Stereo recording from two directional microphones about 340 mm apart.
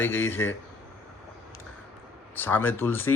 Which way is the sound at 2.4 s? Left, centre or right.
Centre.